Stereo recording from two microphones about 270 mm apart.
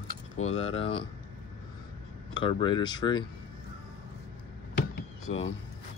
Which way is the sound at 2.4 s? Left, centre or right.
Centre.